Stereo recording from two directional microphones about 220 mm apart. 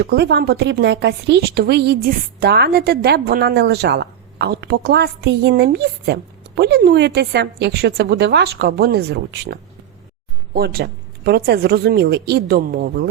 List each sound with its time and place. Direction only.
0.0 s speech: 45° right (ahead or behind)